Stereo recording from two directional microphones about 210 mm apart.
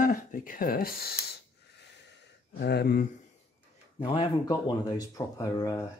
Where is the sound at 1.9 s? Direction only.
55° left (ahead or behind).